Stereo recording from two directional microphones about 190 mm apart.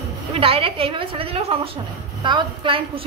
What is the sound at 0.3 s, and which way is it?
A woman's voice, 30° right (ahead or behind).